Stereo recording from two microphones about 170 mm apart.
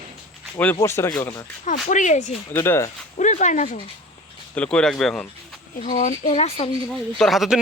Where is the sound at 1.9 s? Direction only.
45° left (ahead or behind).